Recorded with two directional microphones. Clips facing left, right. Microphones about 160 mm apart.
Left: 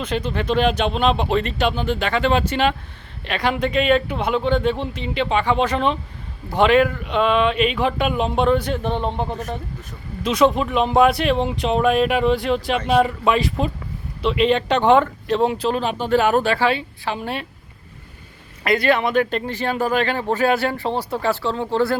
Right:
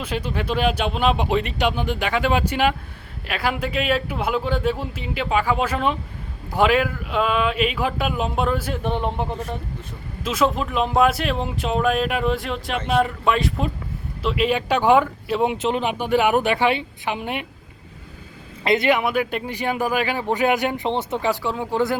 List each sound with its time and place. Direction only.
0.0 s speech: 10° right (ahead or behind)
10.2 s speech: centre (ahead or behind)
18.6 s speech: 20° right (ahead or behind)